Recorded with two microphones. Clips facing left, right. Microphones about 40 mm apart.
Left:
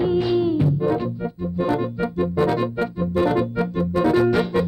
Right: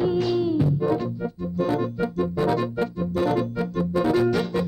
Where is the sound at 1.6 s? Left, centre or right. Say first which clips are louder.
Left 2 dB; left.